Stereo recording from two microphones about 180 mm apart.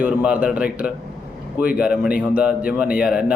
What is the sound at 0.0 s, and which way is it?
A man's voice, 5° right (ahead or behind).